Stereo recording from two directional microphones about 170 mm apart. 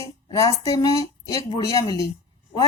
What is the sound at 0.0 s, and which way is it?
Speech, 20° left (ahead or behind).